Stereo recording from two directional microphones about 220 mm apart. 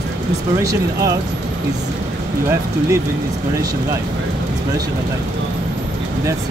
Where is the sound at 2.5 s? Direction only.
10° right (ahead or behind).